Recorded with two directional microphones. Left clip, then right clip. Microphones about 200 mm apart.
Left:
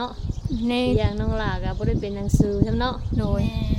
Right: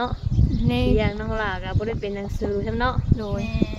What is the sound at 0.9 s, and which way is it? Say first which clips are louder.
Speech: right 1 dB; 30° right (ahead or behind).